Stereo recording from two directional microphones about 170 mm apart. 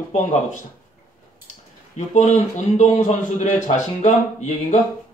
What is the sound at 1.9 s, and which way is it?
A man's voice, 45° left (ahead or behind).